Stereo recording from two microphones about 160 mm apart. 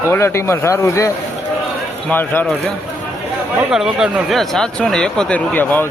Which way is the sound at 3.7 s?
Centre (ahead or behind).